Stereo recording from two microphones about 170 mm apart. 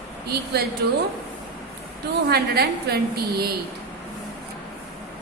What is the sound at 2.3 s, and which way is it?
A woman's voice, 70° right (ahead or behind).